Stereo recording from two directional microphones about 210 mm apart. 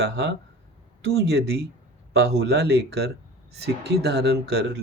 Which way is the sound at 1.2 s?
50° right (ahead or behind).